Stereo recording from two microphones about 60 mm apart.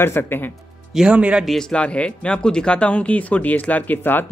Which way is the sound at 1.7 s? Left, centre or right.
Centre.